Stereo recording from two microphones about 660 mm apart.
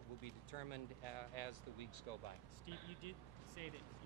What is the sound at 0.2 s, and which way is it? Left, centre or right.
Speech, left.